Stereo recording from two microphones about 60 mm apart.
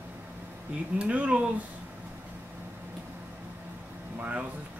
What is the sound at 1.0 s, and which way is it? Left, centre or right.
Speech, right.